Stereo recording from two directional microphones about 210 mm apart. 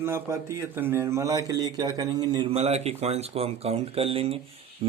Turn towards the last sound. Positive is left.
turn(degrees=-25)  # may be behind; listen again after turning